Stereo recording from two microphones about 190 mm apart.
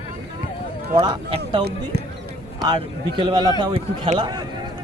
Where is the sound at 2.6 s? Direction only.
25° right (ahead or behind).